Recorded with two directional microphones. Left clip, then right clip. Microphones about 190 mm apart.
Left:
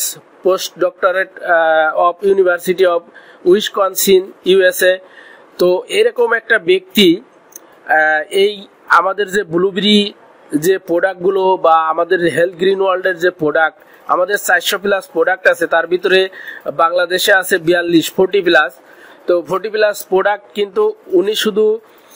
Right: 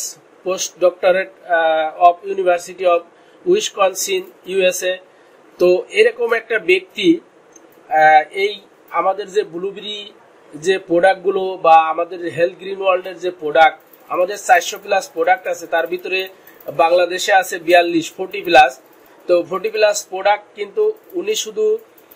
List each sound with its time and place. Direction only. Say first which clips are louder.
0.5 s speech: left 2 dB; 45° left (ahead or behind)
10.9 s speech: even; 45° left (ahead or behind)